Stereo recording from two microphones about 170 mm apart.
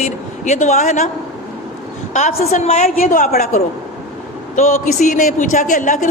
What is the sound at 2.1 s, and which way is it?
A woman's voice, 40° left (ahead or behind).